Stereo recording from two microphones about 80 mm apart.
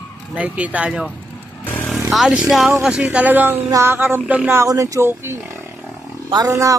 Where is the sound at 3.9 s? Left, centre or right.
Right.